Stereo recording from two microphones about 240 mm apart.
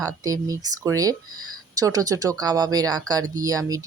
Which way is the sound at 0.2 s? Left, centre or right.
Centre.